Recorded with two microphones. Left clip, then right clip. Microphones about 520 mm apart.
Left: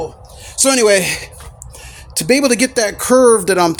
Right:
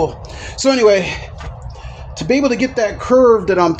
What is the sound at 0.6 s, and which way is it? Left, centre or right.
Speech, left.